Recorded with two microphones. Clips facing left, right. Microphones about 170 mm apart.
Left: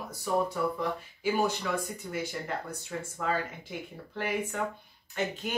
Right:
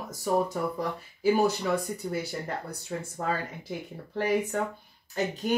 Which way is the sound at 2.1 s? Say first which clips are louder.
Even; 35° right (ahead or behind).